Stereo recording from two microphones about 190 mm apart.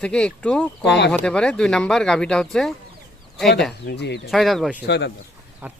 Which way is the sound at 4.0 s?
60° left (ahead or behind).